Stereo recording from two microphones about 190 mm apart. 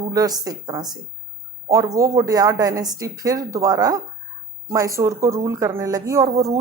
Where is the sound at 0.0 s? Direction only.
20° right (ahead or behind).